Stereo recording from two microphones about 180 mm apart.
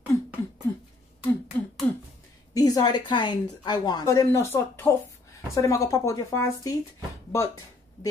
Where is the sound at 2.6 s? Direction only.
20° left (ahead or behind).